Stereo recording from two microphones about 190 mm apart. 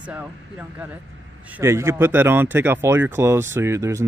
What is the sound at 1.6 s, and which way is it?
Speech, 15° right (ahead or behind).